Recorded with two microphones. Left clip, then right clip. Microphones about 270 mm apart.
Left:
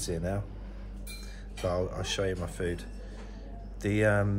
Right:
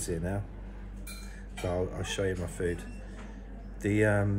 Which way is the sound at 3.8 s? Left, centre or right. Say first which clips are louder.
Even; centre.